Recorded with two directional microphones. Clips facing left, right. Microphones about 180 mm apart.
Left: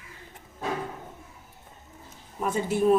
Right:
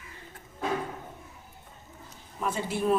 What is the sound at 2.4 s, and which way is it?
Speech, 45° left (ahead or behind).